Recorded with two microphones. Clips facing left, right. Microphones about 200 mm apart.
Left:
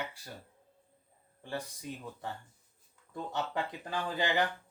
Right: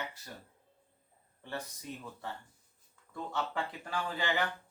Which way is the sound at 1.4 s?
10° left (ahead or behind).